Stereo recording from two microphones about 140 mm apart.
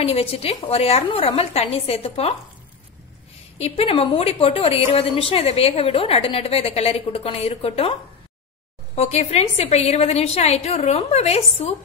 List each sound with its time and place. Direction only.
0.0 s a woman's voice: 45° left (ahead or behind)
3.5 s a woman's voice: 45° left (ahead or behind)
8.9 s a woman's voice: 50° left (ahead or behind)